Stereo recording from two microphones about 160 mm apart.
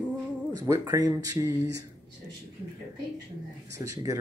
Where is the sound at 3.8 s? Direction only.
20° right (ahead or behind).